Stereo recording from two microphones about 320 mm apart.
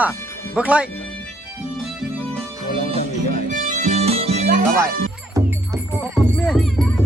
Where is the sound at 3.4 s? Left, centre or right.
Right.